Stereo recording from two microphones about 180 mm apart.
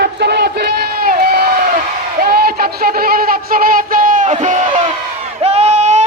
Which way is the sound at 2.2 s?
55° right (ahead or behind).